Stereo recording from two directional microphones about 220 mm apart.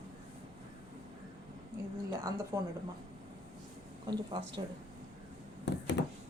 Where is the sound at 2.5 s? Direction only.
15° right (ahead or behind).